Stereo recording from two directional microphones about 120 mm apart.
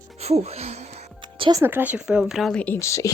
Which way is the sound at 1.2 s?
40° right (ahead or behind).